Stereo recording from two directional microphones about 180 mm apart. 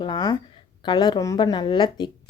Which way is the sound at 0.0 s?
25° left (ahead or behind).